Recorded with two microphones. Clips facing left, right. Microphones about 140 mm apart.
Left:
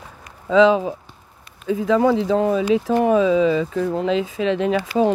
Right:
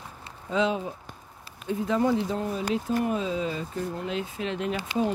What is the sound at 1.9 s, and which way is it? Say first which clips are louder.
Speech: left 8 dB; 90° left.